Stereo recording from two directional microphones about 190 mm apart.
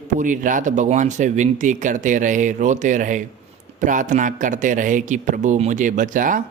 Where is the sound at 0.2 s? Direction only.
40° right (ahead or behind).